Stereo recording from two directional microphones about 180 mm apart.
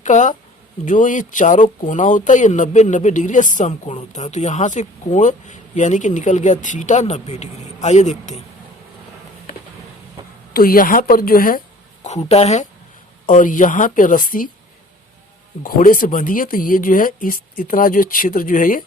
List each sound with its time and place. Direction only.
0.0 s speech: 45° left (ahead or behind)
10.5 s speech: 55° left (ahead or behind)
12.3 s speech: 35° left (ahead or behind)
15.6 s speech: 50° left (ahead or behind)